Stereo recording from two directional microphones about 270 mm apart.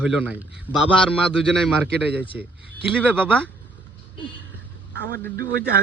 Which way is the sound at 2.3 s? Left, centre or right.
Centre.